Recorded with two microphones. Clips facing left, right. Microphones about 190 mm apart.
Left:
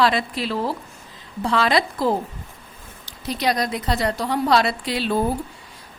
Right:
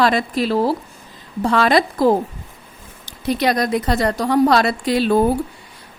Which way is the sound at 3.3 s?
55° right (ahead or behind).